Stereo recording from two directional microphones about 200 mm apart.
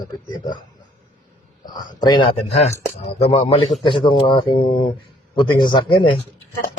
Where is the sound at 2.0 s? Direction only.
20° left (ahead or behind).